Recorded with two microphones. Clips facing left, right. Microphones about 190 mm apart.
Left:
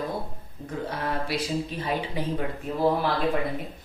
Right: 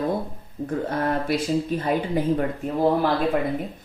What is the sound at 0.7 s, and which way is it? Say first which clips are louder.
Speech: right 6 dB; 50° right (ahead or behind).